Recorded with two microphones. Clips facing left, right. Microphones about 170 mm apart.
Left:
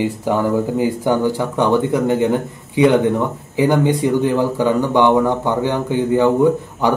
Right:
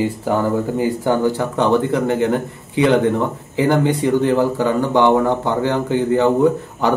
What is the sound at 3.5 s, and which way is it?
Speech, 15° left (ahead or behind).